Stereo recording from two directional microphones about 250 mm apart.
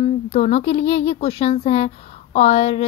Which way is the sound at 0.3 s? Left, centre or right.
Left.